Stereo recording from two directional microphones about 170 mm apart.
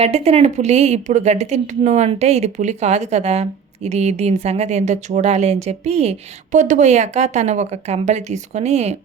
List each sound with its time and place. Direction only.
0.0 s a woman's voice: 40° right (ahead or behind)